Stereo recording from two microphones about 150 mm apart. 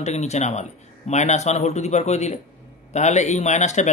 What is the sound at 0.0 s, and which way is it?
A man's voice, 50° left (ahead or behind).